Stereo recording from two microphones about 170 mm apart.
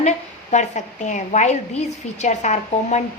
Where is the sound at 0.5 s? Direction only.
45° left (ahead or behind).